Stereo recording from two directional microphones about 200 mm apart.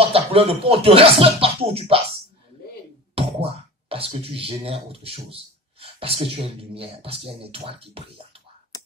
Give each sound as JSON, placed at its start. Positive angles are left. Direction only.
{"t": 0.1, "sound": "speech", "side_deg": -30}
{"t": 3.2, "sound": "speech", "side_deg": -30}
{"t": 8.7, "sound": "a sound", "side_deg": 15}